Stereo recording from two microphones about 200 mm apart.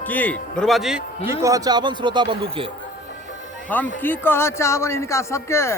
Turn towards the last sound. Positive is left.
turn(degrees=15)  # may be behind; listen again after turning